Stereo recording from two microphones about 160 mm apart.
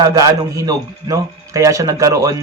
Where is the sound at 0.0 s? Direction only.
20° right (ahead or behind).